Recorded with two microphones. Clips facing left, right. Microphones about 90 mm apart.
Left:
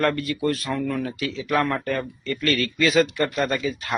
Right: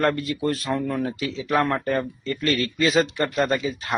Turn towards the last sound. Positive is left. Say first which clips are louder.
# right 1 dB
turn(degrees=-25)  # may be behind; listen again after turning